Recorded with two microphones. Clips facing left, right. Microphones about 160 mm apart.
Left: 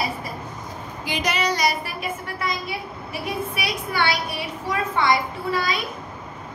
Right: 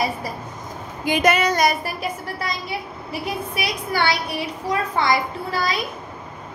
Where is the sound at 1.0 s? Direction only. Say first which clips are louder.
Right 6 dB; 50° right (ahead or behind).